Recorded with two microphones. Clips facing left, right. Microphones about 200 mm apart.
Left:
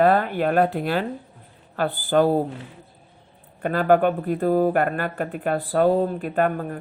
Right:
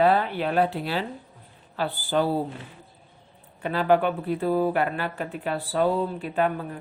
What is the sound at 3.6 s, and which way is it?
Speech, 50° left (ahead or behind).